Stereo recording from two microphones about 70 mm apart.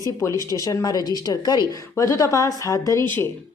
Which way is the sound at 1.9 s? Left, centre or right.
Left.